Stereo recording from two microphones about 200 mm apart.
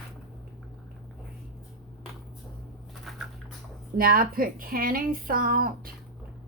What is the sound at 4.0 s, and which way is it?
Speech, 45° right (ahead or behind).